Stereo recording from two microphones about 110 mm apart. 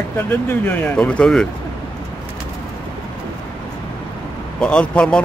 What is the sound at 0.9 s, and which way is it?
Speech, 10° left (ahead or behind).